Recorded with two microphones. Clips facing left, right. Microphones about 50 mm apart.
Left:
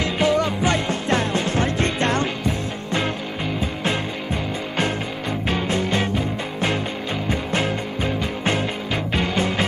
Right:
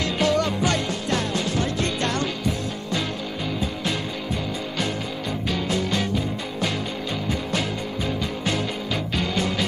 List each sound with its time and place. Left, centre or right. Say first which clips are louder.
0.0 s music: left 2 dB; centre